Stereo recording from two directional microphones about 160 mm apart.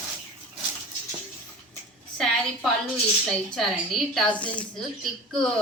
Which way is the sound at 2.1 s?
5° left (ahead or behind).